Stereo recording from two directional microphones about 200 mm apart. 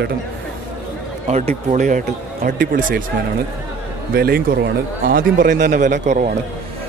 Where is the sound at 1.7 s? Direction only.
40° right (ahead or behind).